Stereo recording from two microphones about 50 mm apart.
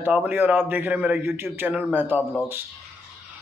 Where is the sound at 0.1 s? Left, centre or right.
Right.